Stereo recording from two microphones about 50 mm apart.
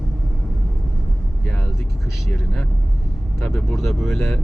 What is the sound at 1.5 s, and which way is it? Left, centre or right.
Vehicle, left.